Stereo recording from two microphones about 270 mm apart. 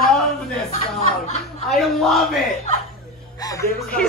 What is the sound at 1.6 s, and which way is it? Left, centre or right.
Speech, centre.